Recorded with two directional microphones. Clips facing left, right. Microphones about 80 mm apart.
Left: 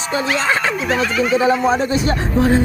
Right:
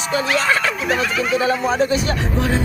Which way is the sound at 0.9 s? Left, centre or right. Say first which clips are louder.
Left 3 dB; centre.